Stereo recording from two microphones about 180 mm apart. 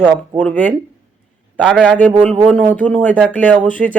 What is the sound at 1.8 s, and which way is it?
Speech, 5° left (ahead or behind).